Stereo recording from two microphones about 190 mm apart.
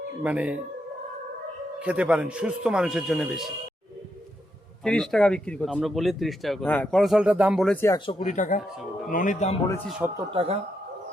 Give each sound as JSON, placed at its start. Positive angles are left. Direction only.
{"t": 0.2, "sound": "speech", "side_deg": -5}
{"t": 1.8, "sound": "speech", "side_deg": -5}
{"t": 4.8, "sound": "speech", "side_deg": 5}
{"t": 7.8, "sound": "speech", "side_deg": 15}
{"t": 8.2, "sound": "speech", "side_deg": 40}
{"t": 10.0, "sound": "speech", "side_deg": -10}
{"t": 10.3, "sound": "a man's voice", "side_deg": -30}